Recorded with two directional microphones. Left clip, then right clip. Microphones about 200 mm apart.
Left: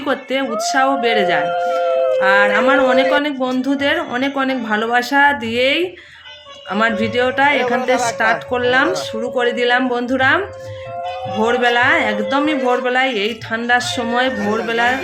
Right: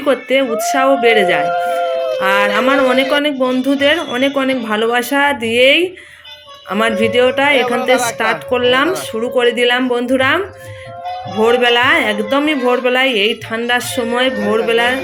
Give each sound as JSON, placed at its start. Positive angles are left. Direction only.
{"t": 0.0, "sound": "a man's voice", "side_deg": 0}
{"t": 7.6, "sound": "speech", "side_deg": -55}
{"t": 8.2, "sound": "a man's voice", "side_deg": 0}